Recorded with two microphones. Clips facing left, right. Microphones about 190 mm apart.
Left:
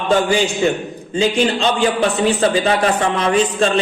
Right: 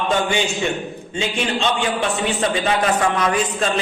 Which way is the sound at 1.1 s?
35° left (ahead or behind).